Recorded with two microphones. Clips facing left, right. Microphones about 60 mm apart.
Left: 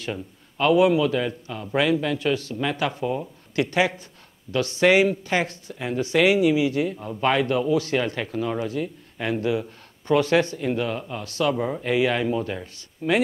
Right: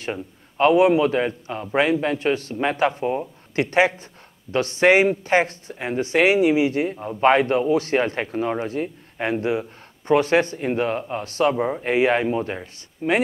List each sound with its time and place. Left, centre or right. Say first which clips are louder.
0.0 s speech: right 2 dB; right